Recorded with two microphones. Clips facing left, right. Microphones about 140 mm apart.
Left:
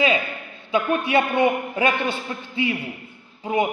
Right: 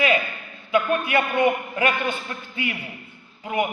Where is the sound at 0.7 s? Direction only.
25° left (ahead or behind).